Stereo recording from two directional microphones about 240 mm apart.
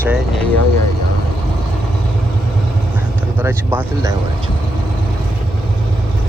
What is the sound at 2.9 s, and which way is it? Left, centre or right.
Vehicle, centre.